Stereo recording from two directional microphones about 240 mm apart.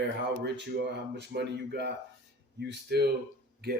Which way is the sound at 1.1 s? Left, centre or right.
Right.